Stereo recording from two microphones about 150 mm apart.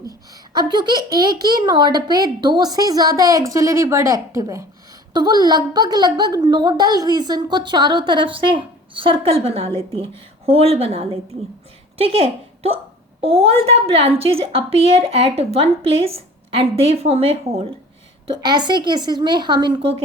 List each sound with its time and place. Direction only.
0.5 s a woman's voice: 30° right (ahead or behind)
18.3 s speech: 30° right (ahead or behind)